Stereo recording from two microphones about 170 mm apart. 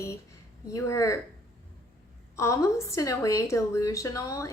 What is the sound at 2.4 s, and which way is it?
A woman's voice, 15° left (ahead or behind).